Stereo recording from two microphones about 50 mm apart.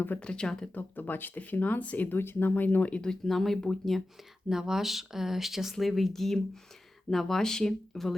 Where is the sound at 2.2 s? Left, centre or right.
Left; by 4.0 s centre.